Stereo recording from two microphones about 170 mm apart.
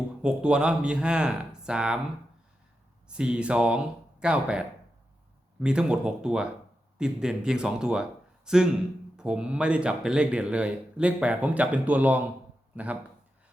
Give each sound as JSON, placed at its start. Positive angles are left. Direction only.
{"t": 0.2, "sound": "speech", "side_deg": -5}
{"t": 3.1, "sound": "speech", "side_deg": -5}